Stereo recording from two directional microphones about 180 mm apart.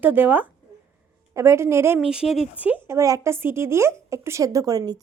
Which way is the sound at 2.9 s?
20° right (ahead or behind).